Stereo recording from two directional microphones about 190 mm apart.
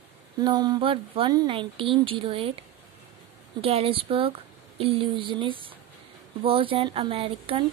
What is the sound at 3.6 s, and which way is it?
Speech, 30° right (ahead or behind).